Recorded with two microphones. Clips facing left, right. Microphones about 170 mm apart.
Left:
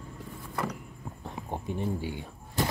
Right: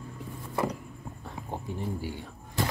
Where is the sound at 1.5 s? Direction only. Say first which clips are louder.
Left 2 dB; 20° left (ahead or behind).